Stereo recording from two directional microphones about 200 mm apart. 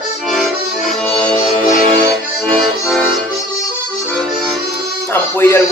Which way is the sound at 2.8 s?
5° left (ahead or behind).